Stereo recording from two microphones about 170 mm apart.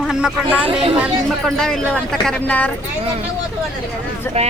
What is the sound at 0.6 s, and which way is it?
Speech, 30° right (ahead or behind).